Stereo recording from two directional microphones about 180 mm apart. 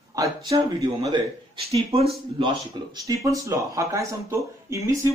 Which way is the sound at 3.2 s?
15° right (ahead or behind).